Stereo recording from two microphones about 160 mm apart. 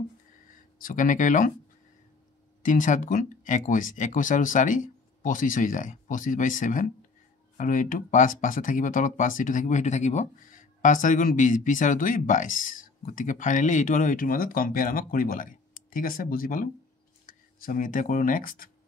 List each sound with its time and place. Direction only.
0.8 s speech: 55° left (ahead or behind)
2.6 s speech: 55° left (ahead or behind)